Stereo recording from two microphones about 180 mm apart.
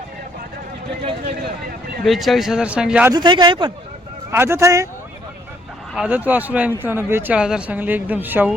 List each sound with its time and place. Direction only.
2.0 s speech: centre (ahead or behind)
3.1 s speech: 25° right (ahead or behind)
4.3 s speech: 15° right (ahead or behind)
5.9 s speech: 5° right (ahead or behind)